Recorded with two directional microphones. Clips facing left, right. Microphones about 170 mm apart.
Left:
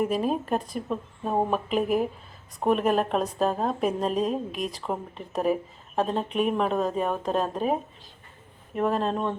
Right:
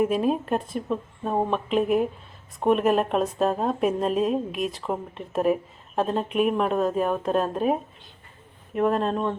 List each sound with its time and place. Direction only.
0.0 s a woman's voice: centre (ahead or behind)